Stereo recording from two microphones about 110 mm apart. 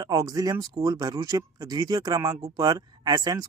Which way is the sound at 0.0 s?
30° right (ahead or behind).